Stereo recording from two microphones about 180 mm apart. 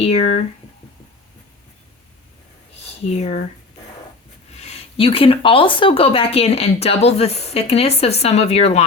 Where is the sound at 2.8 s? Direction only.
35° left (ahead or behind).